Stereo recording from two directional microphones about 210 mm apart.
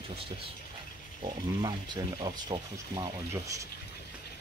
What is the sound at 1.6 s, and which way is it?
Speech, 20° right (ahead or behind).